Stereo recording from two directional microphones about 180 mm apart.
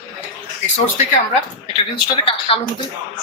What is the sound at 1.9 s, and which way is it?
Speech, 30° left (ahead or behind).